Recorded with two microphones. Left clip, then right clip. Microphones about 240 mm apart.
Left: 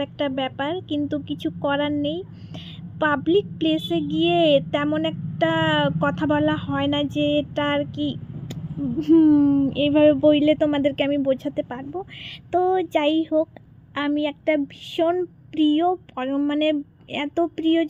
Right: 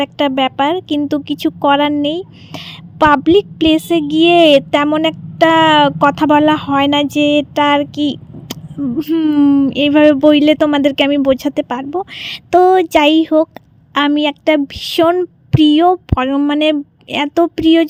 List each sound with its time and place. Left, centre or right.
0.0 s speech: right